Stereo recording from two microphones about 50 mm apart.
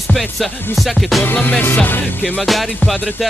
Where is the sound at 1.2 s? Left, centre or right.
Left.